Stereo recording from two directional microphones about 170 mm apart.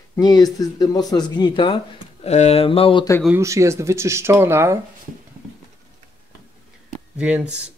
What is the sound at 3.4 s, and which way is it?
Speech, 15° right (ahead or behind).